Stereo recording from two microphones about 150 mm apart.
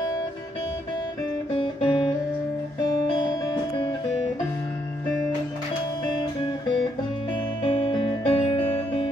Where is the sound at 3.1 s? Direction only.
30° left (ahead or behind).